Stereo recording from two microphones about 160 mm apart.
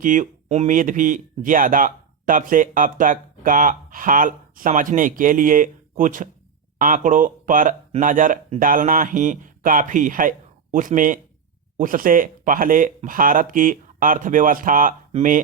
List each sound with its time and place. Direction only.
0.0 s speech: 55° right (ahead or behind)